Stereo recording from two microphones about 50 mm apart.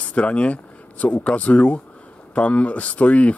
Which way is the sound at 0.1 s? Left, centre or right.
Left.